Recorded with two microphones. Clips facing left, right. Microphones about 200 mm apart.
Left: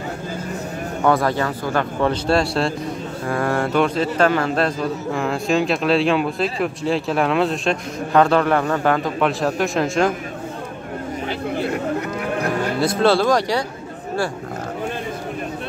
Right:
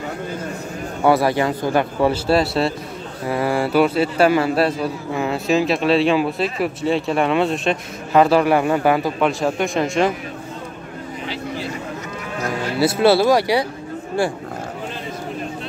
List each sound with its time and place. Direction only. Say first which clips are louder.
1.0 s a man's voice: right 2 dB; 10° right (ahead or behind)
11.2 s vehicle: left 4 dB; 55° left (ahead or behind)
12.3 s cattle: left 1 dB; 55° left (ahead or behind)
12.7 s speech: right 3 dB; 5° right (ahead or behind)